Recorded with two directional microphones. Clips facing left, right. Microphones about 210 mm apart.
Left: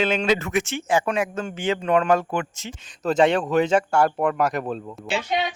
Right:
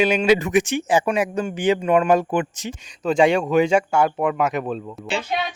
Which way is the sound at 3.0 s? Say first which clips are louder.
Right 2 dB; centre (ahead or behind).